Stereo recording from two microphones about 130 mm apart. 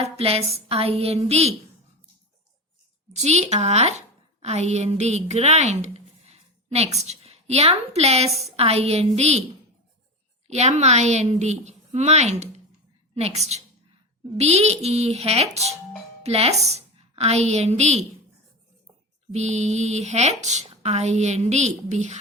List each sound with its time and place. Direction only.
0.0 s a woman's voice: 50° right (ahead or behind)
3.1 s a woman's voice: 60° right (ahead or behind)
10.5 s a woman's voice: 60° right (ahead or behind)
19.3 s speech: 60° right (ahead or behind)